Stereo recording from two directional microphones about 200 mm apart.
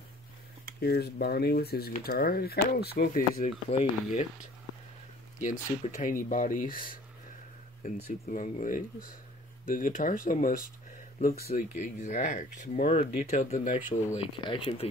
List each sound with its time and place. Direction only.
0.7 s speech: 50° left (ahead or behind)
3.7 s speech: 35° left (ahead or behind)
5.4 s speech: 40° left (ahead or behind)
8.3 s speech: 40° left (ahead or behind)
14.1 s speech: 25° left (ahead or behind)